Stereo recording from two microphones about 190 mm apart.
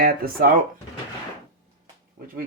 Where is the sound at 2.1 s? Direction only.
50° right (ahead or behind).